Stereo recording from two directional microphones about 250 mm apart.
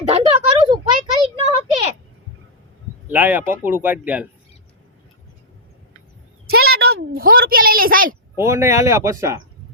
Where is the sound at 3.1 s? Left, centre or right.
Centre.